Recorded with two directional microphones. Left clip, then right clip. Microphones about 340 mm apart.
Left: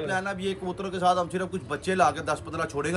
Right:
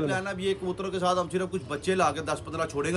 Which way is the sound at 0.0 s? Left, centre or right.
Centre.